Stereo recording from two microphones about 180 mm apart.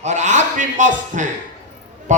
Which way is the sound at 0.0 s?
40° right (ahead or behind).